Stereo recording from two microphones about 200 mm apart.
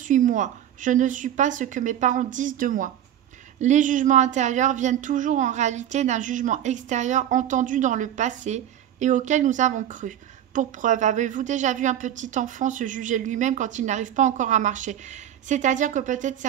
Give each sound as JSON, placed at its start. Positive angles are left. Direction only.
{"t": 0.1, "sound": "speech", "side_deg": -40}